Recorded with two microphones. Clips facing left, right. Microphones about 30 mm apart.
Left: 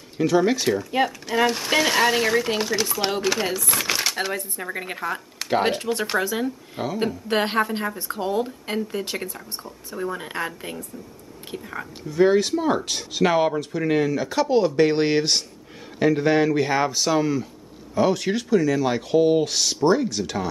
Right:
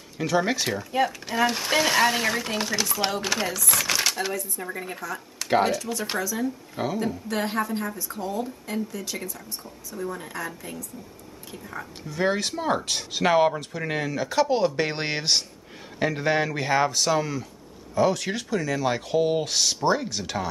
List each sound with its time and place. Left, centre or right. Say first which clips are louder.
0.2 s speech: left 4 dB; centre
3.8 s a sound: even; centre
4.3 s a woman's voice: left 2 dB; left
6.8 s speech: even; centre
7.2 s a woman's voice: left 7 dB; left
12.1 s speech: left 7 dB; centre